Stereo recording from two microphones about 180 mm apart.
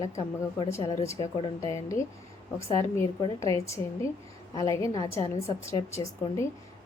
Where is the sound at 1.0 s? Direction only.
15° left (ahead or behind).